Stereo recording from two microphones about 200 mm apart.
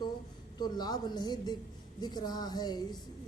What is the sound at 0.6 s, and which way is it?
A woman's voice, 20° left (ahead or behind).